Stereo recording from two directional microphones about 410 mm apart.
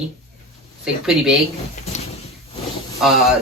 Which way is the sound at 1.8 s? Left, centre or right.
Centre.